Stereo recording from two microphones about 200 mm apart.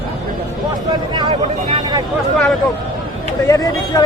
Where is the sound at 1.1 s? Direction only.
20° right (ahead or behind).